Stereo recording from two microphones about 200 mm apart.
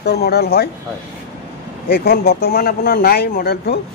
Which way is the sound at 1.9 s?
50° left (ahead or behind).